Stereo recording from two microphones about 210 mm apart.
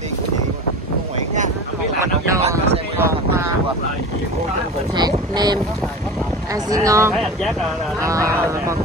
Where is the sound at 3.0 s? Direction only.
15° right (ahead or behind).